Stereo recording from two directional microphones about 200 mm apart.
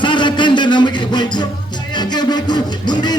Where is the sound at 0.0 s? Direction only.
25° left (ahead or behind).